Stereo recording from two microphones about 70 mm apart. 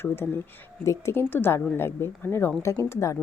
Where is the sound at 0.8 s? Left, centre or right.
Left.